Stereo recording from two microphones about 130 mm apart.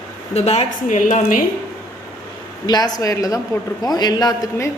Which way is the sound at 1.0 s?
85° left.